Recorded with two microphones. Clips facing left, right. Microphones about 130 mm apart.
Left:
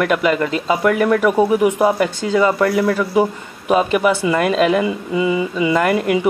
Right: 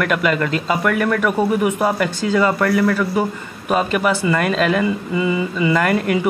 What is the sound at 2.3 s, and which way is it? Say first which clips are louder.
Speech: left 1 dB; 20° left (ahead or behind).